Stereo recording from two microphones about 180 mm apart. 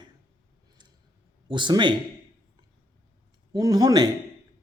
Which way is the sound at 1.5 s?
25° right (ahead or behind).